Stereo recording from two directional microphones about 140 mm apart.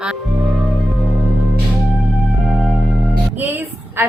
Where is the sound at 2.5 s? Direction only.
Centre (ahead or behind).